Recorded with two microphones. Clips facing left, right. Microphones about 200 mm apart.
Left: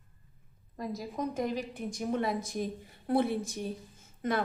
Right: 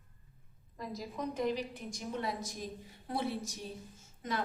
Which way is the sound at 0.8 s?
45° left (ahead or behind).